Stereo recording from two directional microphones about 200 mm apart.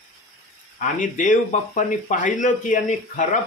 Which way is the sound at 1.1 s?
40° left (ahead or behind).